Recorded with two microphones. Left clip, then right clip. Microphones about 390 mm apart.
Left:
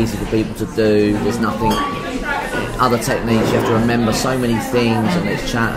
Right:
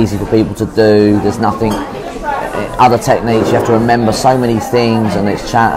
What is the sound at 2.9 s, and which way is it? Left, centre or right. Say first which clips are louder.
Speech: right 7 dB; right.